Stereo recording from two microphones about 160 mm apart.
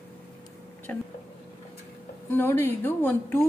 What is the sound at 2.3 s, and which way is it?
Speech, 15° left (ahead or behind).